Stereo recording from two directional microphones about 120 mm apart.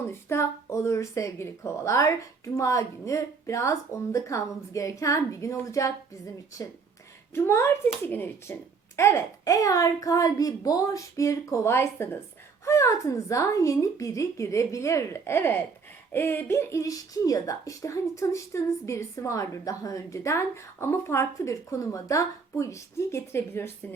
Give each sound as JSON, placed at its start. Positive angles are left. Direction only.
{"t": 0.1, "sound": "speech", "side_deg": 20}
{"t": 7.3, "sound": "speech", "side_deg": 20}